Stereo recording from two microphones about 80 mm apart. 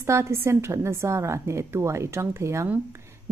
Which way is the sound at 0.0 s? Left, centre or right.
Right.